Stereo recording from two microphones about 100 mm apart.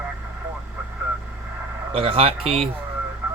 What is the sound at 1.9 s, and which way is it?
Speech, 70° right (ahead or behind).